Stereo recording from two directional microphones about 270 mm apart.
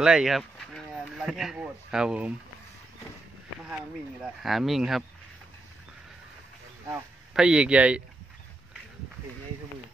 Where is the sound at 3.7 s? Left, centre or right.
Centre.